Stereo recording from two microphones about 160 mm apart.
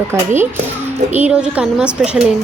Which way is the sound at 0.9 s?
10° right (ahead or behind).